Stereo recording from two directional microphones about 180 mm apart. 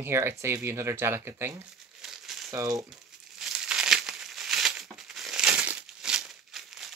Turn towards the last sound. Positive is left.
turn(degrees=0)  # may be behind; listen again after turning